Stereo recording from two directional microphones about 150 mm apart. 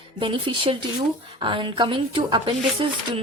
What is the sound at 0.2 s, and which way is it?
Speech, 35° right (ahead or behind).